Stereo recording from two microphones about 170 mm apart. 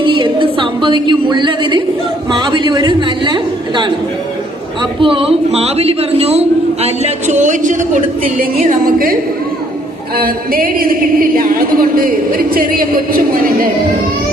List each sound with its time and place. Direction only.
0.0 s a sound: 30° right (ahead or behind)
2.3 s a man's voice: 25° right (ahead or behind); by 7.9 s 45° right (ahead or behind)
10.2 s a woman's voice: 60° right (ahead or behind)